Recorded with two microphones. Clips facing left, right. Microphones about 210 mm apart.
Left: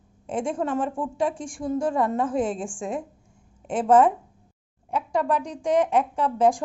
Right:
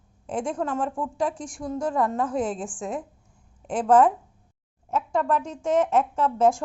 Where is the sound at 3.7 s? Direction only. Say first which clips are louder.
Left 1 dB; 25° left (ahead or behind).